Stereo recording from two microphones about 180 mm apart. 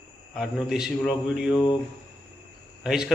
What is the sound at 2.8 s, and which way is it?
Speech, 5° right (ahead or behind).